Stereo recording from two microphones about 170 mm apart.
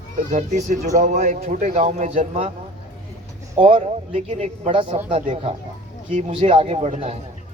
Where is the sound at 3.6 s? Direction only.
35° right (ahead or behind).